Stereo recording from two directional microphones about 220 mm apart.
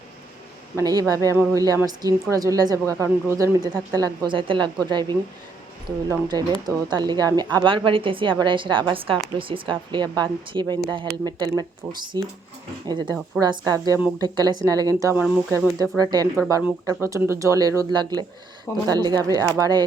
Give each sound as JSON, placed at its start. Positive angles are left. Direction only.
{"t": 0.8, "sound": "a woman's voice", "side_deg": -15}